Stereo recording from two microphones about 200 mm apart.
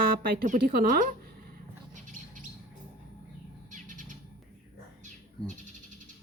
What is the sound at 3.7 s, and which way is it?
Bird, 40° right (ahead or behind).